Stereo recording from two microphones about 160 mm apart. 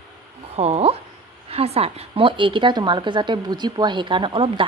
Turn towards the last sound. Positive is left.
turn(degrees=-30)  # may be behind; listen again after turning